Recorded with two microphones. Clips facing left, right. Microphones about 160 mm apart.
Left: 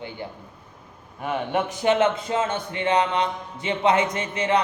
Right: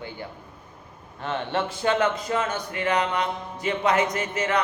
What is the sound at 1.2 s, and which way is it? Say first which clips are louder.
Speech: left 2 dB; 15° left (ahead or behind).